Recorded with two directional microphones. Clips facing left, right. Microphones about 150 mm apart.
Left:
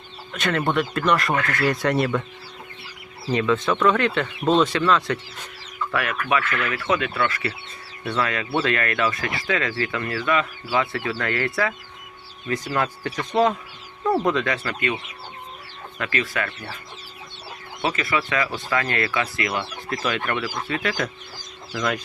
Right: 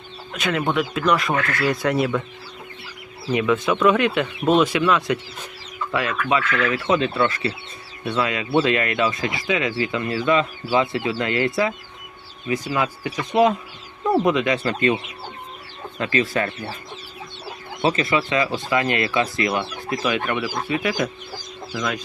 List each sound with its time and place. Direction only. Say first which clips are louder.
0.3 s speech: even; 5° right (ahead or behind)
3.3 s speech: right 1 dB; 10° right (ahead or behind)
12.5 s speech: right 2 dB; 5° right (ahead or behind); by 14.9 s 30° right (ahead or behind)
16.0 s speech: right 5 dB; 25° right (ahead or behind)
17.8 s speech: right 4 dB; 25° right (ahead or behind); by 21.9 s 5° right (ahead or behind)